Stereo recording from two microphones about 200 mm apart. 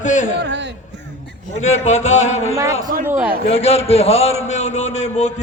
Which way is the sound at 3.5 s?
30° left (ahead or behind).